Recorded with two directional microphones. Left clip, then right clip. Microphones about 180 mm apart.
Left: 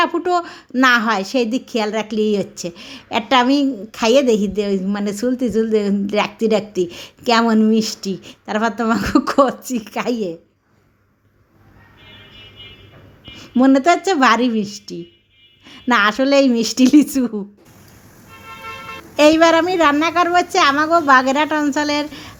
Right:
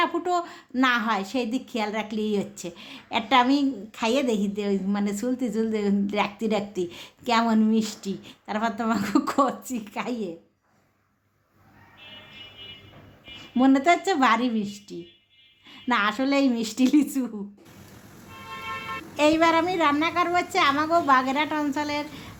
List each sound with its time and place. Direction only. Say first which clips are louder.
0.0 s a woman's voice: left 7 dB; 25° left (ahead or behind)
13.3 s a woman's voice: left 7 dB; 25° left (ahead or behind)
19.1 s a woman's voice: left 9 dB; 30° left (ahead or behind)